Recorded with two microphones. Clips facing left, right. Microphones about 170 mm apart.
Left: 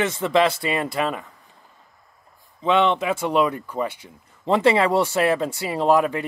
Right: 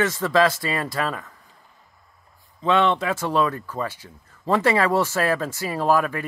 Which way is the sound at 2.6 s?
15° left (ahead or behind).